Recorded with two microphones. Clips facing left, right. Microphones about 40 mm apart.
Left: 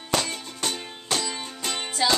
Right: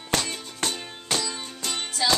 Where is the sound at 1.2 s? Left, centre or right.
Centre.